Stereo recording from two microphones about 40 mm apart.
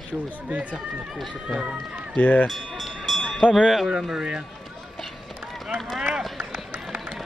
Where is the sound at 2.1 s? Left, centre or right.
Left.